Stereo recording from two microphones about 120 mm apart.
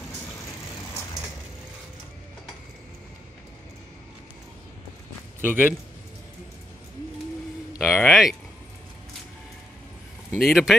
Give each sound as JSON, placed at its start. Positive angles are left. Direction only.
{"t": 5.4, "sound": "a man's voice", "side_deg": -15}
{"t": 7.8, "sound": "speech", "side_deg": 15}
{"t": 8.1, "sound": "speech", "side_deg": 0}
{"t": 10.4, "sound": "speech", "side_deg": 0}